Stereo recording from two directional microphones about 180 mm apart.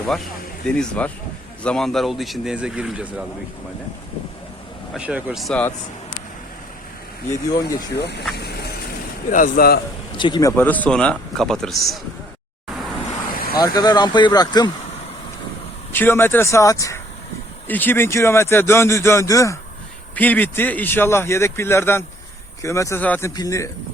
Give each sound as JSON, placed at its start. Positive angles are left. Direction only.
{"t": 0.8, "sound": "a man's voice", "side_deg": 5}
{"t": 4.9, "sound": "a man's voice", "side_deg": -5}
{"t": 7.3, "sound": "speech", "side_deg": 20}
{"t": 7.9, "sound": "speech", "side_deg": 70}
{"t": 8.4, "sound": "vehicle", "side_deg": 65}
{"t": 9.3, "sound": "speech", "side_deg": 50}
{"t": 10.2, "sound": "speech", "side_deg": 25}
{"t": 10.5, "sound": "a man's voice", "side_deg": 10}
{"t": 13.6, "sound": "speech", "side_deg": 20}
{"t": 15.9, "sound": "speech", "side_deg": 10}
{"t": 23.3, "sound": "speech", "side_deg": 20}